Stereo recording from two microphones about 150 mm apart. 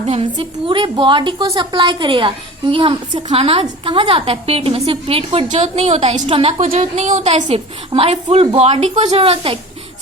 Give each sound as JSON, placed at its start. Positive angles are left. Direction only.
{"t": 0.0, "sound": "a woman's voice", "side_deg": -40}
{"t": 7.5, "sound": "a woman's voice", "side_deg": -40}